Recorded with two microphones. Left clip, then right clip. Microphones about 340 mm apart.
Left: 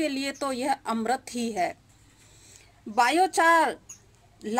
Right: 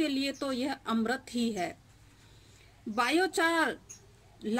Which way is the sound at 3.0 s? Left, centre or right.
Centre.